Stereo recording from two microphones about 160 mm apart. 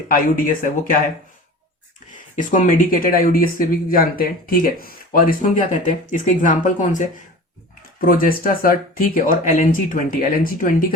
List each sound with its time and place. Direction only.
0.1 s speech: 60° left (ahead or behind)
2.1 s speech: 50° left (ahead or behind)